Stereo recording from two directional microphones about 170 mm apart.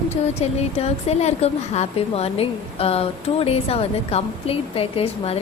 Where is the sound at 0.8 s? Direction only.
40° left (ahead or behind).